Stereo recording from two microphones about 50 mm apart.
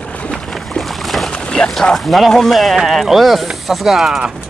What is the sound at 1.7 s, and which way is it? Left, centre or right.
Speech, centre.